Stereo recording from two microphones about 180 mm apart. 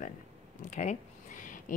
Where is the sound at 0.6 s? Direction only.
40° left (ahead or behind).